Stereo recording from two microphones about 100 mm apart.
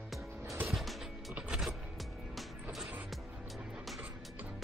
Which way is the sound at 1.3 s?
10° right (ahead or behind).